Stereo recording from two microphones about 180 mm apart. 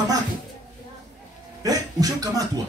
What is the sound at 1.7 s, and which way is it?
Speech, 20° right (ahead or behind).